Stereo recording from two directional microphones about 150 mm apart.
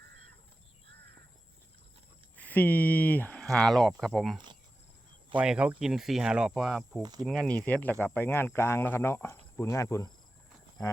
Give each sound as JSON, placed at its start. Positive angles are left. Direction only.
{"t": 2.3, "sound": "speech", "side_deg": 10}
{"t": 5.4, "sound": "speech", "side_deg": -10}
{"t": 7.0, "sound": "speech", "side_deg": -25}
{"t": 7.3, "sound": "speech", "side_deg": 5}